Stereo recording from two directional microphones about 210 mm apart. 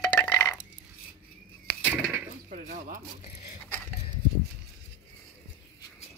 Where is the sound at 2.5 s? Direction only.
40° right (ahead or behind).